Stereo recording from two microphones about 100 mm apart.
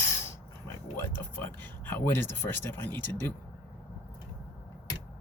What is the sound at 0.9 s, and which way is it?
Speech, 25° left (ahead or behind).